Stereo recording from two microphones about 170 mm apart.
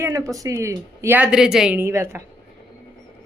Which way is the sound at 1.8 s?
15° right (ahead or behind).